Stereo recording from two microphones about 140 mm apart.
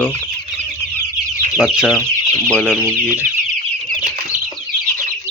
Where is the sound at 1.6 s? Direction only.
5° right (ahead or behind).